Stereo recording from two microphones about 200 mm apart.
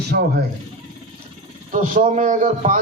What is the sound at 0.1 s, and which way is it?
Speech, 55° right (ahead or behind).